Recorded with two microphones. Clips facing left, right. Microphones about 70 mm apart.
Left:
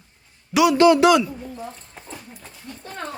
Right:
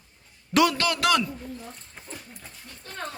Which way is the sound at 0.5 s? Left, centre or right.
Centre.